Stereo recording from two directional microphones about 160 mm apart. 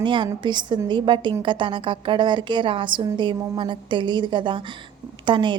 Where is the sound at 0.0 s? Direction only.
30° right (ahead or behind).